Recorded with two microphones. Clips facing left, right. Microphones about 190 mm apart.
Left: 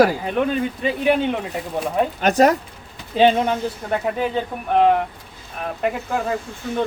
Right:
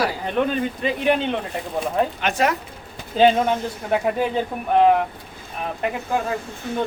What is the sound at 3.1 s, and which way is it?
Speech, centre (ahead or behind).